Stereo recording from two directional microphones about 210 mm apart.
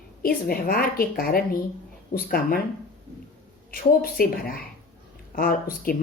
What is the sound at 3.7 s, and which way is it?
A woman's voice, 45° left (ahead or behind).